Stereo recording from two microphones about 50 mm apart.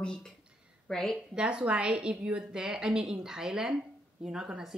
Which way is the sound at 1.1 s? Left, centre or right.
Centre.